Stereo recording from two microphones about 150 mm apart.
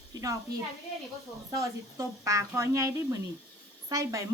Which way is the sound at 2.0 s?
20° right (ahead or behind).